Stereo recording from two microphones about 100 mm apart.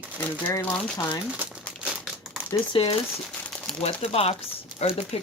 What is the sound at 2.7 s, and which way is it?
Speech, 65° left (ahead or behind).